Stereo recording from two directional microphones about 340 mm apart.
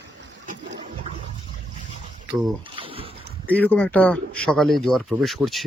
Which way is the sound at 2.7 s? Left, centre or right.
Centre.